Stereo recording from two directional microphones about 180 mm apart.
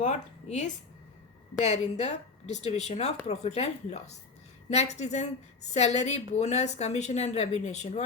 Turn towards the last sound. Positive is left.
turn(degrees=40)  # may be behind; listen again after turning